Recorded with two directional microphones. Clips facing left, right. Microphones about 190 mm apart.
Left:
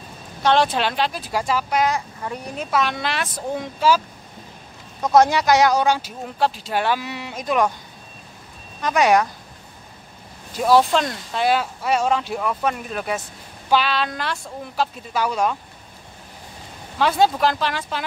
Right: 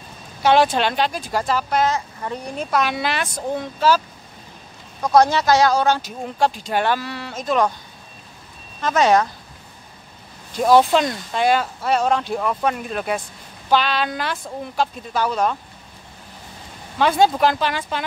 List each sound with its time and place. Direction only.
0.4 s speech: 5° right (ahead or behind); by 4.0 s 10° left (ahead or behind)
5.1 s speech: 20° left (ahead or behind)
7.0 s speech: 15° left (ahead or behind)
8.8 s speech: 15° left (ahead or behind)
10.5 s speech: centre (ahead or behind)
17.0 s speech: centre (ahead or behind)